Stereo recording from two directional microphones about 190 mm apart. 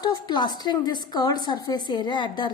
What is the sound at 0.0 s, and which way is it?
A woman's voice, 20° left (ahead or behind).